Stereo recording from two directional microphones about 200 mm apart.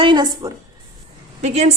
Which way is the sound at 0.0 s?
20° right (ahead or behind).